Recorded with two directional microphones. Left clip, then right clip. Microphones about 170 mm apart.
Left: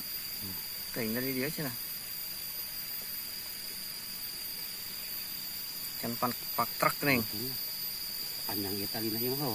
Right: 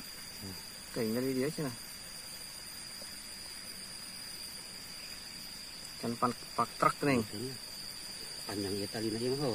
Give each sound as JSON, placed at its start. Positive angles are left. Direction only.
{"t": 1.0, "sound": "speech", "side_deg": -5}
{"t": 6.0, "sound": "speech", "side_deg": -5}
{"t": 8.5, "sound": "speech", "side_deg": -30}